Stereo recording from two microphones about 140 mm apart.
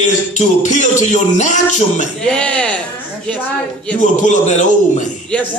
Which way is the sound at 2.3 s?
5° left (ahead or behind).